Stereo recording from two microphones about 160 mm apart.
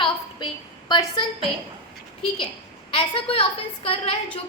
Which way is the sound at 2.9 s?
35° left (ahead or behind).